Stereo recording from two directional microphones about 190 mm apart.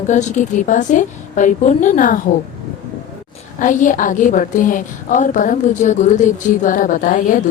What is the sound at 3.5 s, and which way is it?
A woman's voice, 45° left (ahead or behind).